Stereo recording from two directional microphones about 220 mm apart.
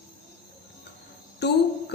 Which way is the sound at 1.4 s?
50° left (ahead or behind).